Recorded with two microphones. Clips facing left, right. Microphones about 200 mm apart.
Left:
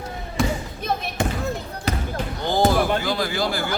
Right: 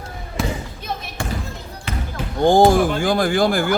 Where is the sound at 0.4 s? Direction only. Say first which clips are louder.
Left 1 dB; centre (ahead or behind).